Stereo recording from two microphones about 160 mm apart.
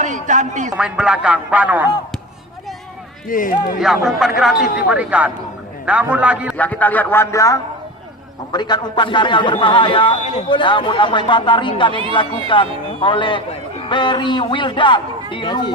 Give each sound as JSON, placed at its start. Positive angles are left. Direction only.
{"t": 0.0, "sound": "speech", "side_deg": -50}
{"t": 0.8, "sound": "a man's voice", "side_deg": -5}
{"t": 3.2, "sound": "speech", "side_deg": 60}
{"t": 3.8, "sound": "a man's voice", "side_deg": 0}
{"t": 6.6, "sound": "a man's voice", "side_deg": 10}